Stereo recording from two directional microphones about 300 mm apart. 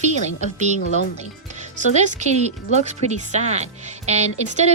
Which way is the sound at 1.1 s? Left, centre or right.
Right.